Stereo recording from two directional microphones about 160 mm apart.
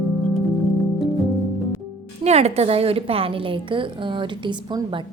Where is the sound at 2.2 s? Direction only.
40° right (ahead or behind).